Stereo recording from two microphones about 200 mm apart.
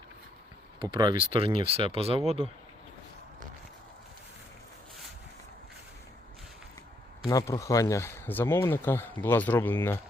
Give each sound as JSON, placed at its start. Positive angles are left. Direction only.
{"t": 0.8, "sound": "speech", "side_deg": -20}
{"t": 7.3, "sound": "speech", "side_deg": 15}